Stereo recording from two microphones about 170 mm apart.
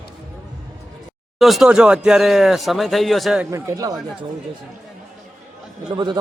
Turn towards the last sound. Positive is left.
turn(degrees=-25)  # may be behind; listen again after turning